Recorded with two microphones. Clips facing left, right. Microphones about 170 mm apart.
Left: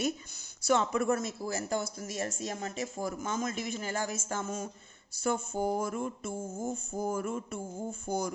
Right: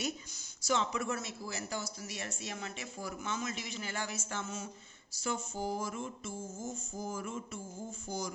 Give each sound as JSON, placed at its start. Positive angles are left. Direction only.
{"t": 0.6, "sound": "speech", "side_deg": 50}
{"t": 5.2, "sound": "mantra", "side_deg": 55}